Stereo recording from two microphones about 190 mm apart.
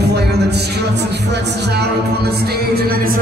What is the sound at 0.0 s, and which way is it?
Music, 60° right (ahead or behind).